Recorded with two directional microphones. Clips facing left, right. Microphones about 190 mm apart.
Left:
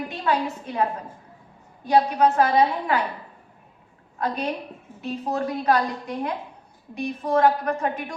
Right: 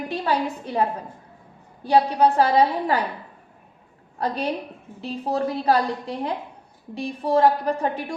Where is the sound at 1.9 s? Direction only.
35° right (ahead or behind).